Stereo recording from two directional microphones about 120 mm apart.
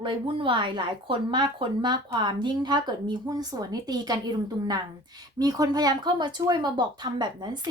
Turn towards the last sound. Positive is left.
turn(degrees=-35)  # may be behind; listen again after turning